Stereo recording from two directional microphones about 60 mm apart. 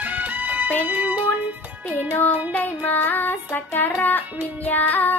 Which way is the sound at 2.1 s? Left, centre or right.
Left.